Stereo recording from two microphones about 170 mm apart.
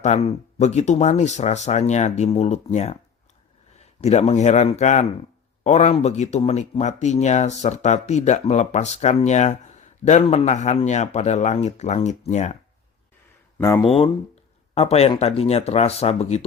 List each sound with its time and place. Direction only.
0.0 s speech: 40° left (ahead or behind)
13.6 s speech: 15° left (ahead or behind)
13.8 s speech: 35° left (ahead or behind)